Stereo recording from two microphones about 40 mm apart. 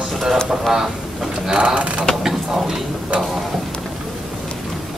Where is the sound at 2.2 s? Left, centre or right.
Centre.